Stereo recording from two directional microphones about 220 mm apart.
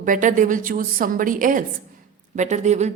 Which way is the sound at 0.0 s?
35° right (ahead or behind).